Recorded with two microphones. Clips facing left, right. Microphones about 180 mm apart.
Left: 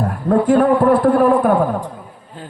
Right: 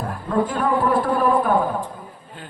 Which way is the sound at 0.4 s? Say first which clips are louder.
Left 11 dB; 65° left (ahead or behind).